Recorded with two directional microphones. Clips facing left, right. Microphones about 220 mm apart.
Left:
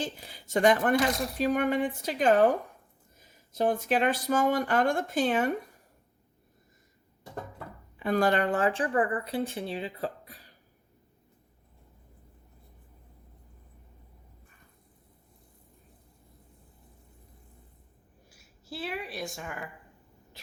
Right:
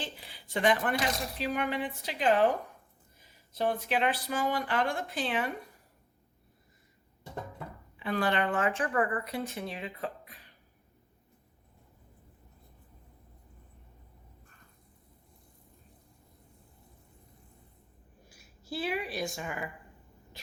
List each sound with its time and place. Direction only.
0.0 s speech: 45° left (ahead or behind)
7.9 s speech: 45° left (ahead or behind)
18.3 s a woman's voice: centre (ahead or behind)